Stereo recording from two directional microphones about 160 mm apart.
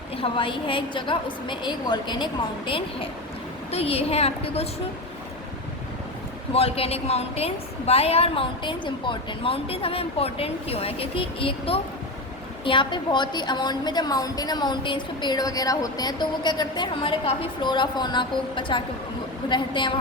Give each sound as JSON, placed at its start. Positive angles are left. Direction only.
{"t": 0.2, "sound": "a woman's voice", "side_deg": 30}
{"t": 6.5, "sound": "a woman's voice", "side_deg": 40}